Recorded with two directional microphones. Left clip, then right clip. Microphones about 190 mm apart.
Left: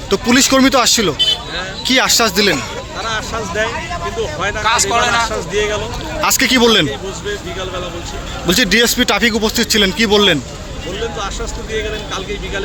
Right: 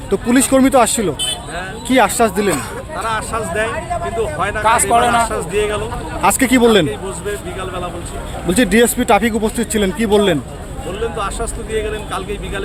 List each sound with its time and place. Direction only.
0.1 s speech: 10° right (ahead or behind)
4.6 s a man's voice: 55° right (ahead or behind)
6.2 s speech: 10° right (ahead or behind)
8.4 s speech: 10° right (ahead or behind)